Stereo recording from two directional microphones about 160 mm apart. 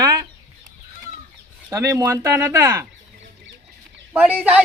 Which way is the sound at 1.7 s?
20° right (ahead or behind).